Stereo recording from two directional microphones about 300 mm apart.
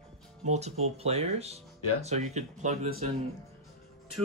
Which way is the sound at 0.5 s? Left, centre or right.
Right.